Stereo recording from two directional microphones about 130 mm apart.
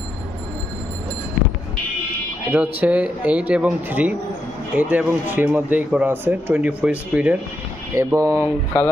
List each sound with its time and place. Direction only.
2.5 s speech: 10° right (ahead or behind)
7.9 s speech: 20° right (ahead or behind)